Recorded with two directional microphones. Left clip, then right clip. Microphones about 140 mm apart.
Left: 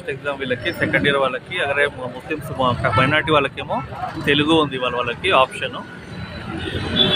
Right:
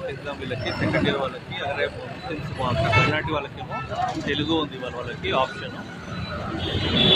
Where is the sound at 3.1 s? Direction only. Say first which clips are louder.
Left 9 dB; 35° left (ahead or behind).